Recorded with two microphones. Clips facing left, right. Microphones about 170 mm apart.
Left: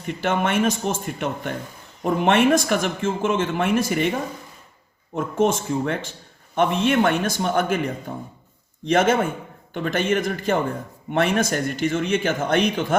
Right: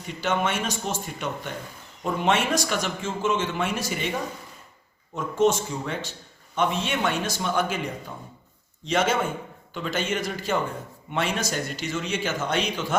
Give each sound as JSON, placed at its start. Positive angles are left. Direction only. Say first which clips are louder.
{"t": 0.2, "sound": "a man's voice", "louder": "left 4 dB", "side_deg": 55}
{"t": 5.1, "sound": "a man's voice", "louder": "left 1 dB", "side_deg": 55}
{"t": 8.1, "sound": "speech", "louder": "left 7 dB", "side_deg": 35}
{"t": 8.9, "sound": "a man's voice", "louder": "left 5 dB", "side_deg": 55}